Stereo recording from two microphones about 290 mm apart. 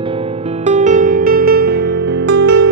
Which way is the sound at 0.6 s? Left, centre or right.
Right.